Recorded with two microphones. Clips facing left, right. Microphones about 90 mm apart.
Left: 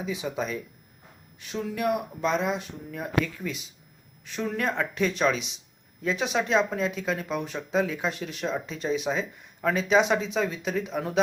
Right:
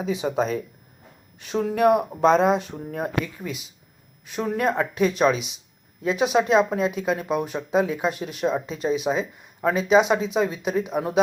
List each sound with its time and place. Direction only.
0.0 s speech: 30° right (ahead or behind)
2.0 s speech: 35° right (ahead or behind)
3.4 s speech: 10° right (ahead or behind)